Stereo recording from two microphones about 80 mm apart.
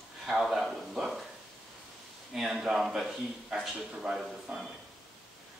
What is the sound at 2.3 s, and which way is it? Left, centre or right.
A man's voice, centre.